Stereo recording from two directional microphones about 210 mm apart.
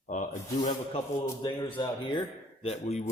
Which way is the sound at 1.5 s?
20° left (ahead or behind).